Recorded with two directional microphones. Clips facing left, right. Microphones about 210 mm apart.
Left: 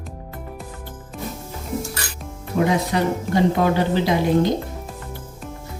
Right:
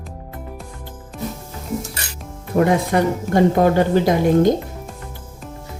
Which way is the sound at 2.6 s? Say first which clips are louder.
Right 3 dB; 50° right (ahead or behind).